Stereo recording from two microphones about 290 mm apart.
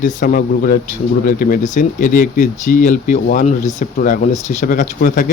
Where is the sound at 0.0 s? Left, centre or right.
Left.